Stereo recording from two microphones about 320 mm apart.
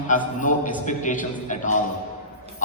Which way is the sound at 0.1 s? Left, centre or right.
Left.